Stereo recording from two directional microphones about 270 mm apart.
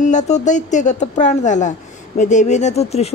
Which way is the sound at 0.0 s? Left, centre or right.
Left.